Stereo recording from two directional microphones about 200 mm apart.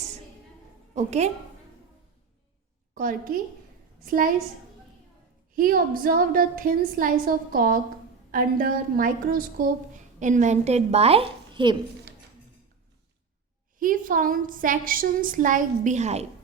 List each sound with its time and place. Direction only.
0.9 s a woman's voice: 35° right (ahead or behind)
2.9 s a woman's voice: 40° right (ahead or behind)
5.5 s a woman's voice: 45° right (ahead or behind); by 11.8 s 25° right (ahead or behind)
13.7 s a woman's voice: 45° right (ahead or behind)